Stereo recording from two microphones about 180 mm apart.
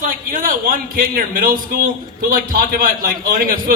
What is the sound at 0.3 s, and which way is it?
A man's voice, 50° right (ahead or behind).